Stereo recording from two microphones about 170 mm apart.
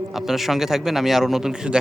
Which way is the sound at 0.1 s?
Centre (ahead or behind).